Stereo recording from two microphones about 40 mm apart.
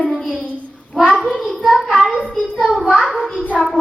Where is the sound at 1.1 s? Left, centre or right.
Centre.